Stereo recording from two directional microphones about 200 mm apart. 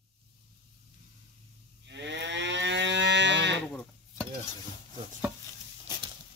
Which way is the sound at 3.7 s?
5° left (ahead or behind).